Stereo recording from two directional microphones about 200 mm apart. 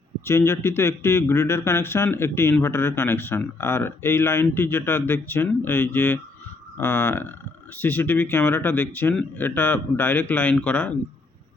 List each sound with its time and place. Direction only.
0.3 s speech: 15° left (ahead or behind)